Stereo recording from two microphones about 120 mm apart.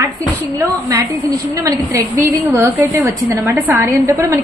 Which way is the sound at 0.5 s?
25° right (ahead or behind).